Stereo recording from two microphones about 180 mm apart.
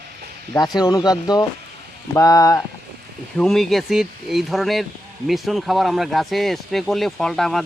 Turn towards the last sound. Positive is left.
turn(degrees=0)  # may be behind; listen again after turning